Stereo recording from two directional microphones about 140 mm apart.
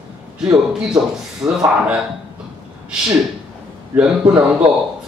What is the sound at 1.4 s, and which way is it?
Speech, 25° right (ahead or behind).